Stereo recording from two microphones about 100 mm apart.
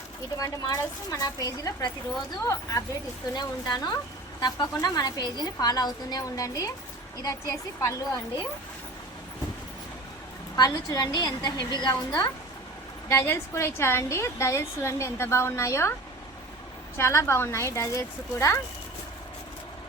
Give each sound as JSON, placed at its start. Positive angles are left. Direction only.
{"t": 0.3, "sound": "a woman's voice", "side_deg": 35}
{"t": 3.3, "sound": "a woman's voice", "side_deg": 45}
{"t": 10.5, "sound": "a woman's voice", "side_deg": 40}
{"t": 13.1, "sound": "a woman's voice", "side_deg": 25}
{"t": 17.0, "sound": "a woman's voice", "side_deg": 25}